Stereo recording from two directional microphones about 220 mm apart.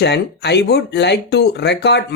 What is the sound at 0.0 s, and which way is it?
Speech, 50° left (ahead or behind).